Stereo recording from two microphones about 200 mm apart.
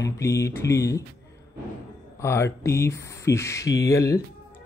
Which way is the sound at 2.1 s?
15° left (ahead or behind).